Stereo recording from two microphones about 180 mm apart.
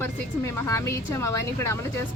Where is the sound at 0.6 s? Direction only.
15° left (ahead or behind).